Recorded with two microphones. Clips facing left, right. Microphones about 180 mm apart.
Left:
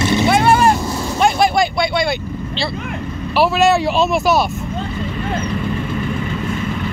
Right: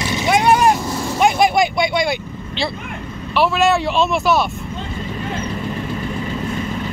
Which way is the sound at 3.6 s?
Centre (ahead or behind).